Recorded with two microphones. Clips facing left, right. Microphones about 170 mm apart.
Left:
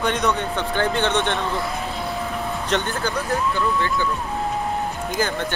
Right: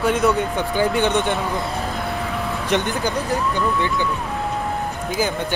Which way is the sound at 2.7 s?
15° right (ahead or behind).